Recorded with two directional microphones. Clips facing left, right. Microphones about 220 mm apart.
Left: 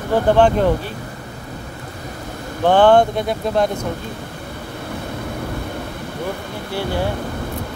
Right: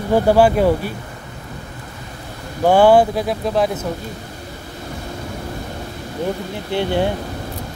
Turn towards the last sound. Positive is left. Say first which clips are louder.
# right 4 dB
turn(degrees=-20)  # may be behind; listen again after turning